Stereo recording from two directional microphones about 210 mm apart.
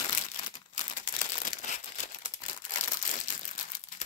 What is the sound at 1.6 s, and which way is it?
Crumpling, 35° left (ahead or behind).